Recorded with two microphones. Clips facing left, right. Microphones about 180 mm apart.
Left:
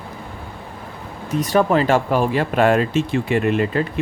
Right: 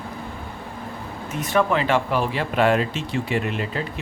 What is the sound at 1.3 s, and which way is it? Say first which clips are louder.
Speech: left 4 dB; 40° left (ahead or behind).